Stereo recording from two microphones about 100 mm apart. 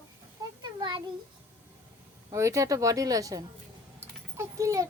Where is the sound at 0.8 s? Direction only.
50° right (ahead or behind).